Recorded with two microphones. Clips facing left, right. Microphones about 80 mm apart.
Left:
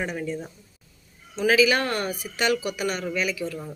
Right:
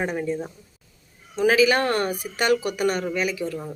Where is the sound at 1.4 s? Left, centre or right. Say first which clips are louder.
Right 2 dB; right.